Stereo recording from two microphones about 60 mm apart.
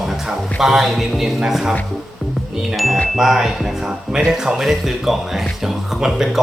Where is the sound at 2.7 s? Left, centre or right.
Centre.